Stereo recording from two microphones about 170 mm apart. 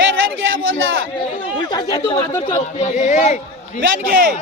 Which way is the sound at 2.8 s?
45° left (ahead or behind).